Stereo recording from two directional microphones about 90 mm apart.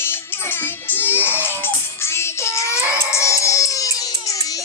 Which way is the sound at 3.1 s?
35° left (ahead or behind).